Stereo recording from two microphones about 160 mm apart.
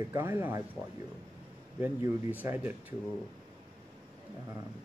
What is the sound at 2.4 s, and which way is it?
Speech, 10° right (ahead or behind).